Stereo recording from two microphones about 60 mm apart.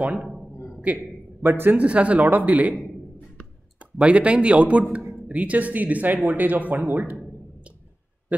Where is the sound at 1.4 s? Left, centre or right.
Right.